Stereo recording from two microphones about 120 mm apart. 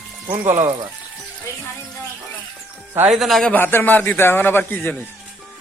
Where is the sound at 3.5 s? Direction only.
15° left (ahead or behind).